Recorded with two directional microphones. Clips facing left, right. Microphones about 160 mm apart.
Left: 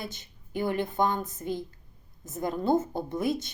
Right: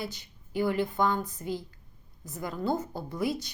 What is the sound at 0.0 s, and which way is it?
A woman's voice, 20° left (ahead or behind).